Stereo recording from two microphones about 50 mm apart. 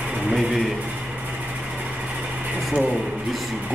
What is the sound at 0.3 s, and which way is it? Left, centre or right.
Speech, centre.